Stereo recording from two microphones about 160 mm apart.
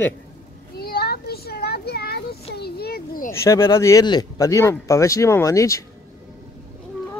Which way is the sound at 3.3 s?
15° left (ahead or behind).